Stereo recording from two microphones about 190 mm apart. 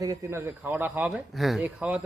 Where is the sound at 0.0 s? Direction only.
15° right (ahead or behind).